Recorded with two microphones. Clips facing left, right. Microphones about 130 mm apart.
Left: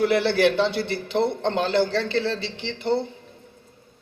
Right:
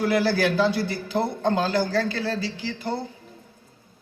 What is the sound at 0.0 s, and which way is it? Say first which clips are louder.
A man's voice: left 2 dB; 25° left (ahead or behind).